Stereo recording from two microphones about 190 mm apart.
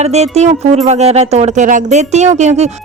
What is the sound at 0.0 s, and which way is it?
Speech, 35° right (ahead or behind).